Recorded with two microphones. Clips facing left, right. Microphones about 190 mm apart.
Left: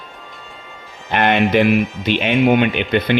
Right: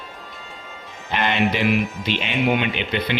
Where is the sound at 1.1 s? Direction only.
55° left (ahead or behind).